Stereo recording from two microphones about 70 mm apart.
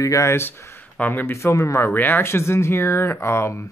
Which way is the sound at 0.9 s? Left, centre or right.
Left.